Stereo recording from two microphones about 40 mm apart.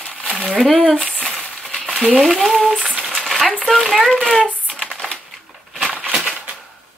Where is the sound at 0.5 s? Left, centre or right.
Centre.